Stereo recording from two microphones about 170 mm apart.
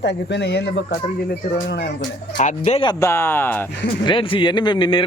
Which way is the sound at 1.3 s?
60° left (ahead or behind).